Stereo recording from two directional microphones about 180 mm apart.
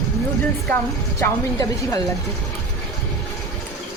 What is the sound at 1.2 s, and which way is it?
Speech, 20° left (ahead or behind).